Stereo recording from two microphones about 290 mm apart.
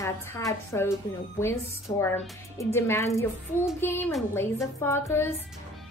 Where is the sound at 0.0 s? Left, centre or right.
Centre.